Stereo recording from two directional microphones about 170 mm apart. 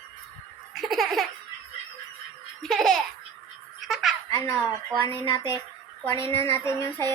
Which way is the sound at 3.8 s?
Centre (ahead or behind).